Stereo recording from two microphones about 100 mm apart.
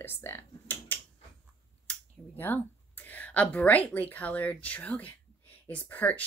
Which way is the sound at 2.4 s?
20° left (ahead or behind).